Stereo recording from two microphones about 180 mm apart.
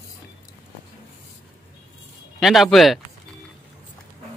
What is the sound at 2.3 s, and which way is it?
Speech, centre (ahead or behind).